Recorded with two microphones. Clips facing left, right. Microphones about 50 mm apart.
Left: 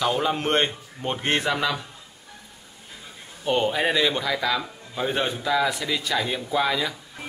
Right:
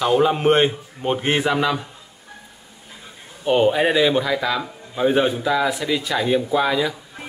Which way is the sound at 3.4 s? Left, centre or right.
Centre.